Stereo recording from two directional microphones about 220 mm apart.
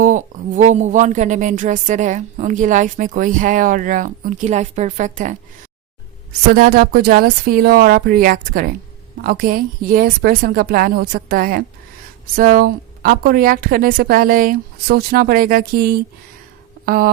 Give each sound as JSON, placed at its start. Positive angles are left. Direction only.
{"t": 0.0, "sound": "speech", "side_deg": -35}
{"t": 6.5, "sound": "a woman's voice", "side_deg": -45}